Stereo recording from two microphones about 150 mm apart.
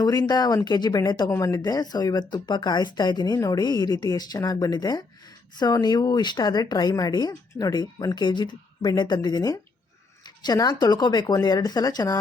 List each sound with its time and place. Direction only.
0.0 s a woman's voice: 25° left (ahead or behind)